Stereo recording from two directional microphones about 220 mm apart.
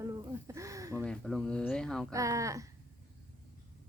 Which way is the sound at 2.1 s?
15° right (ahead or behind).